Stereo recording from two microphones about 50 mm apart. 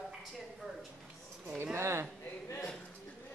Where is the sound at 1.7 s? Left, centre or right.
Right.